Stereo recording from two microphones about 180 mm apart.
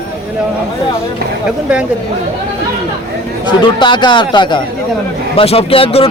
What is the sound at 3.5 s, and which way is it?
A man's voice, 25° left (ahead or behind).